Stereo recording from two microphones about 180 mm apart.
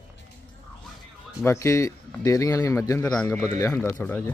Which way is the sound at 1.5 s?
15° left (ahead or behind).